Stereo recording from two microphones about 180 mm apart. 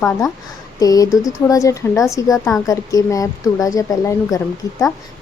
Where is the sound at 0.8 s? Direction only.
20° left (ahead or behind).